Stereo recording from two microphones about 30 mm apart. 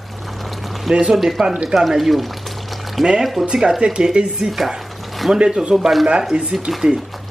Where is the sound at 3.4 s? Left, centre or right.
Right.